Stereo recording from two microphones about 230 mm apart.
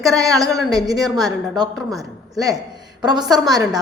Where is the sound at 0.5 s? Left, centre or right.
Centre.